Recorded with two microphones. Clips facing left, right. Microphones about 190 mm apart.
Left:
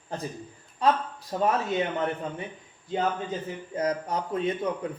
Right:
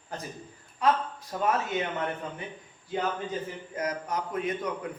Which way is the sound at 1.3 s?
25° left (ahead or behind).